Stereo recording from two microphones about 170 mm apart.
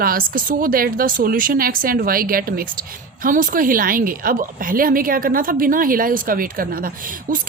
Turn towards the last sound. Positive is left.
turn(degrees=-55)  # may be behind; listen again after turning